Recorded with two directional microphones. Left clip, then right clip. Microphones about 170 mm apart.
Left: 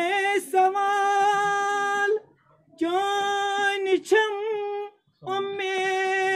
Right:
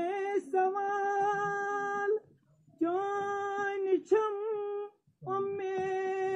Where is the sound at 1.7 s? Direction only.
15° left (ahead or behind).